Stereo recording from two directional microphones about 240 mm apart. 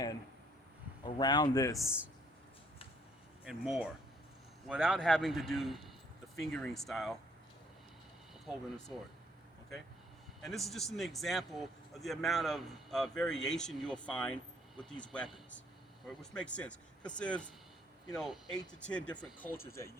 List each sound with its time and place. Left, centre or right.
1.0 s speech: centre
1.8 s a man's voice: centre
3.4 s a man's voice: centre
8.5 s a man's voice: centre
10.4 s a man's voice: centre